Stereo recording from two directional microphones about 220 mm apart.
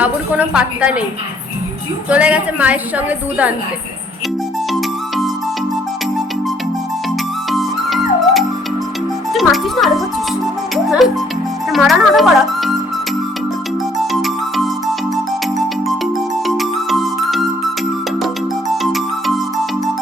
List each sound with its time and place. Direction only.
0.0 s a woman's voice: 5° right (ahead or behind)
2.0 s a woman's voice: 5° right (ahead or behind)
4.7 s music: centre (ahead or behind)
7.5 s music: centre (ahead or behind)
9.3 s a child's voice: centre (ahead or behind)
14.0 s music: centre (ahead or behind)
18.7 s music: centre (ahead or behind)